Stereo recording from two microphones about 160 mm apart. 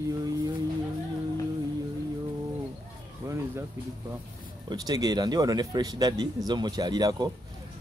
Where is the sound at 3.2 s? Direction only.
20° right (ahead or behind).